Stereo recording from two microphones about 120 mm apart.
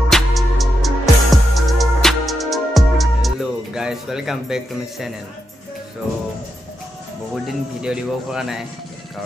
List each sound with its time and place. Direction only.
0.1 s music: centre (ahead or behind)
7.4 s speech: 5° right (ahead or behind)